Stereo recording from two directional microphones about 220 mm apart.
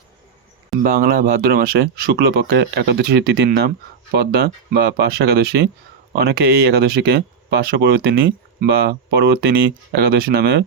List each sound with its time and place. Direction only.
0.8 s speech: 40° right (ahead or behind)